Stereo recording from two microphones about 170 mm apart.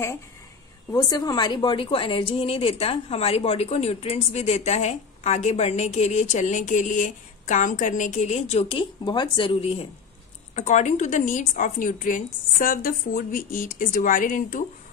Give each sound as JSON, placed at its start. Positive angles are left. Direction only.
{"t": 0.9, "sound": "a woman's voice", "side_deg": 25}